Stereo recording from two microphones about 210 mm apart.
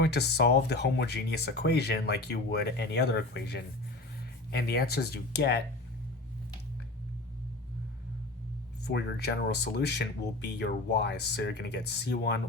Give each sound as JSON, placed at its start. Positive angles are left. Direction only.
{"t": 0.0, "sound": "speech", "side_deg": 50}
{"t": 8.8, "sound": "speech", "side_deg": 55}